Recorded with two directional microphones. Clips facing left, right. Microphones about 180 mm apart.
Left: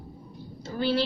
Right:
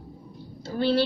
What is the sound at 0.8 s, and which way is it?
Speech, 30° right (ahead or behind).